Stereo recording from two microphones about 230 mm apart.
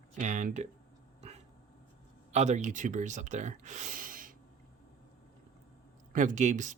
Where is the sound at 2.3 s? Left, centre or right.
Right.